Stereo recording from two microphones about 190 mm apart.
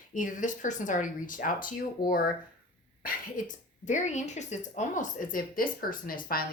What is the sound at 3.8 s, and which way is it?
Speech, 40° left (ahead or behind).